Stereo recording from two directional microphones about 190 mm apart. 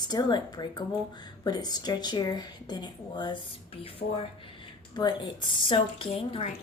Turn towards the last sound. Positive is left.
turn(degrees=30)  # may be behind; listen again after turning